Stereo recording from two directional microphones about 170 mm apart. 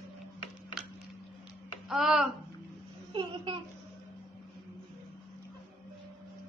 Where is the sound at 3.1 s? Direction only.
30° right (ahead or behind).